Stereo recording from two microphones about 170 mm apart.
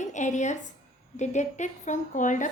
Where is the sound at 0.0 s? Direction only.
45° left (ahead or behind).